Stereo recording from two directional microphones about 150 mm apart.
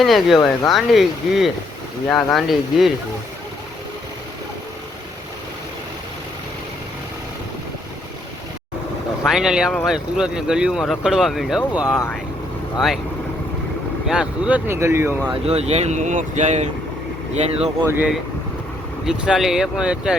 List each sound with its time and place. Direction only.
0.0 s speech: centre (ahead or behind)
9.2 s speech: 5° right (ahead or behind)
14.1 s speech: 5° right (ahead or behind)
15.4 s speech: 45° right (ahead or behind)
17.8 s speech: 15° right (ahead or behind)